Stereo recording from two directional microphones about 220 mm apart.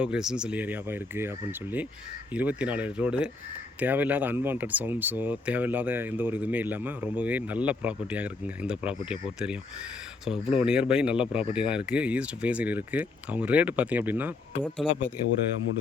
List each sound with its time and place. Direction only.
0.0 s speech: 5° right (ahead or behind)